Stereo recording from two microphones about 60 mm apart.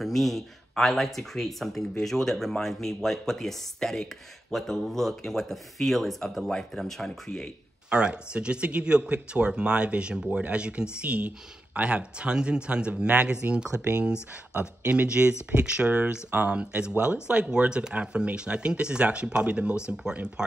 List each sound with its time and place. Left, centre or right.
0.0 s speech: centre
7.9 s speech: centre